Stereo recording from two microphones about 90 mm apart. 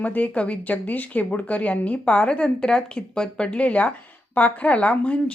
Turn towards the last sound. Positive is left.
turn(degrees=15)  # may be behind; listen again after turning